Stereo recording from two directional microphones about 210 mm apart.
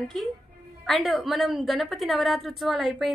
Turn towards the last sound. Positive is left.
turn(degrees=0)  # may be behind; listen again after turning